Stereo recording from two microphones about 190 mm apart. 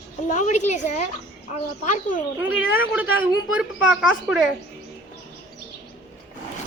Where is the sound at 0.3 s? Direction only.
40° left (ahead or behind).